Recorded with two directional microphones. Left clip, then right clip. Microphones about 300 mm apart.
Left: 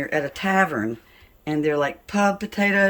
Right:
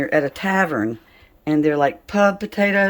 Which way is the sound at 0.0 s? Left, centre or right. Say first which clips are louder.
Right 5 dB; centre.